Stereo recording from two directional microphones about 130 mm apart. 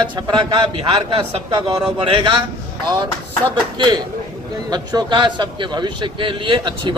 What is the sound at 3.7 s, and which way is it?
A man's voice, 35° right (ahead or behind).